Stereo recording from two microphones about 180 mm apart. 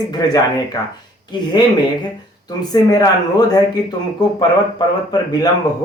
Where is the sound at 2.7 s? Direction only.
20° left (ahead or behind).